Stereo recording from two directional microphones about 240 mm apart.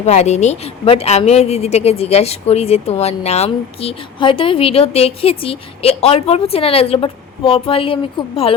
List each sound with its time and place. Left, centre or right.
0.0 s a woman's voice: left